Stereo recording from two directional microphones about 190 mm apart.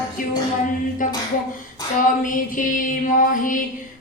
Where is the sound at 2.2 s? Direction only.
45° left (ahead or behind).